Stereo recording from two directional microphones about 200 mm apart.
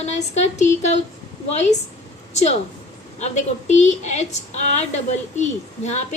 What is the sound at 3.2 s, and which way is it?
A woman's voice, 35° left (ahead or behind).